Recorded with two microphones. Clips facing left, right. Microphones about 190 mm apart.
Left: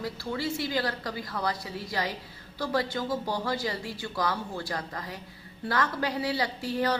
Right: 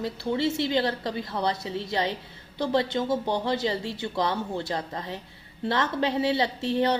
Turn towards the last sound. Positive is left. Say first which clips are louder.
# right 4 dB
turn(degrees=-25)  # may be behind; listen again after turning